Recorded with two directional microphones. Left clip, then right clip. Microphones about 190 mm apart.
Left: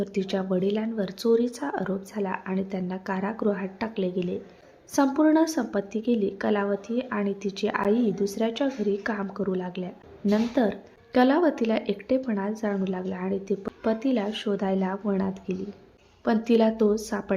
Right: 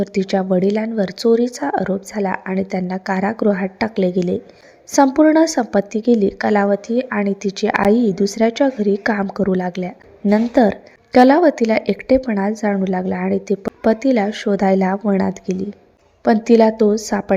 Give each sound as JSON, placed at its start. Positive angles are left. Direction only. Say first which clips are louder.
{"t": 0.0, "sound": "speech", "louder": "right 9 dB", "side_deg": -30}